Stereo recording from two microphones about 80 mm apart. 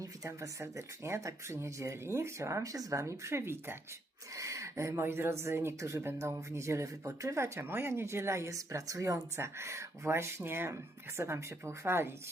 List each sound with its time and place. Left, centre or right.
0.0 s speech: right
4.4 s speech: right